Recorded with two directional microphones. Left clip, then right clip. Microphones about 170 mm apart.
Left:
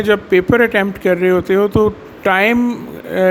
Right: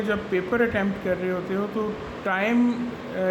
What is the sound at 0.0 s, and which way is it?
A man's voice, 65° left (ahead or behind).